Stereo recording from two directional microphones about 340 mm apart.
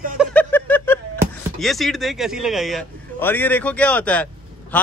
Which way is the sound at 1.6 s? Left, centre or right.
Centre.